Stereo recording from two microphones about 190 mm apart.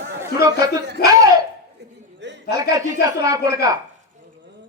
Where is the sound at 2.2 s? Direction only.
65° right (ahead or behind).